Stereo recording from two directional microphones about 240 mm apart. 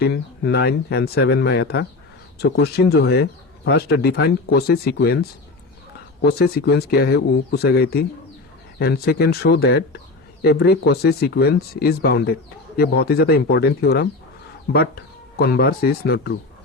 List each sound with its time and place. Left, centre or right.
0.0 s speech: left
6.2 s speech: left